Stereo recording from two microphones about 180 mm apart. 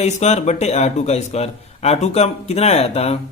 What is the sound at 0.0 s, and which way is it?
A man's voice, 40° left (ahead or behind).